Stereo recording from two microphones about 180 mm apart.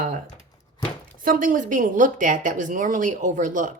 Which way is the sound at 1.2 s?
50° right (ahead or behind).